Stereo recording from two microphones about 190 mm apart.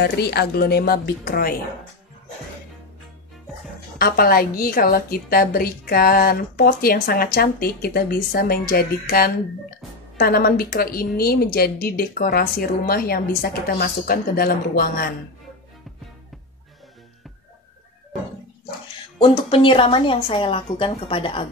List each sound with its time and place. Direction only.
0.0 s a woman's voice: 60° left (ahead or behind)
4.0 s a woman's voice: 50° left (ahead or behind)
10.1 s a woman's voice: 50° left (ahead or behind)
19.5 s a woman's voice: 30° left (ahead or behind)